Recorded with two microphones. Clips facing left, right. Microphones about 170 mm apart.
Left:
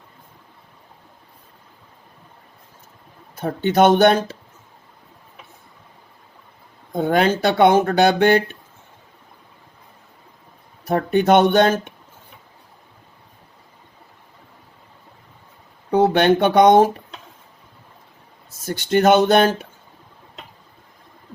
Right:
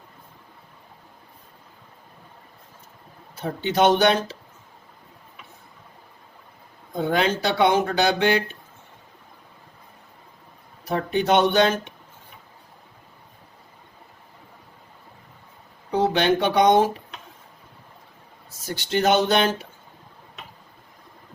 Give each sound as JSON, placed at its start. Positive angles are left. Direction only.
{"t": 3.3, "sound": "speech", "side_deg": 50}
{"t": 6.9, "sound": "speech", "side_deg": 50}
{"t": 10.8, "sound": "speech", "side_deg": 50}
{"t": 15.9, "sound": "speech", "side_deg": 55}
{"t": 18.6, "sound": "speech", "side_deg": 50}